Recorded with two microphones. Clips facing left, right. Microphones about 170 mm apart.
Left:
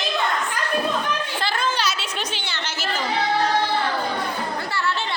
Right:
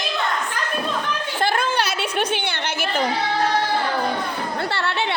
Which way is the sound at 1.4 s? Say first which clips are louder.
Right 4 dB; 55° right (ahead or behind).